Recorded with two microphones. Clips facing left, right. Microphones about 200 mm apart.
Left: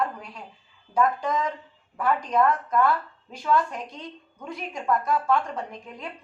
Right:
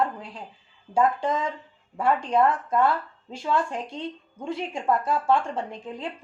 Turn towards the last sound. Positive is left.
turn(degrees=-30)  # may be behind; listen again after turning